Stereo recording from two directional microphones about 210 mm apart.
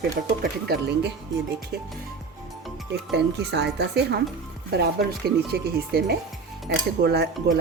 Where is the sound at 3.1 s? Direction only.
50° right (ahead or behind).